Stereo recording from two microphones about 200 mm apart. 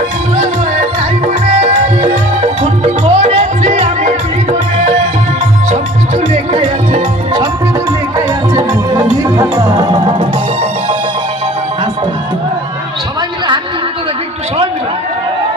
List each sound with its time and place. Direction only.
2.6 s music: 35° right (ahead or behind)
5.7 s music: 35° right (ahead or behind)
8.5 s music: 20° right (ahead or behind)